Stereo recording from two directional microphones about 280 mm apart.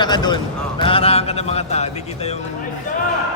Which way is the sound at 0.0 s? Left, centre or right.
Centre.